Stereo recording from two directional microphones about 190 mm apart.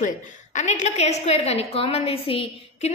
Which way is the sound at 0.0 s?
40° left (ahead or behind).